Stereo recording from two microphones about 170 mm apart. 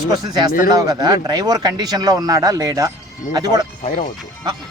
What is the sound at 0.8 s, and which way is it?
A man's voice, 20° right (ahead or behind).